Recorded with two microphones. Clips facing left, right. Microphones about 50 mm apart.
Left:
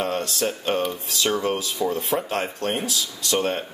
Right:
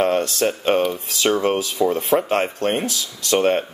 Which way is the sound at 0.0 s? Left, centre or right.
Right.